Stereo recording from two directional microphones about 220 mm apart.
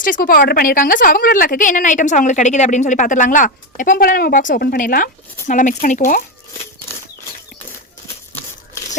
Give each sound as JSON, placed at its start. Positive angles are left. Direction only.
{"t": 0.0, "sound": "a woman's voice", "side_deg": 40}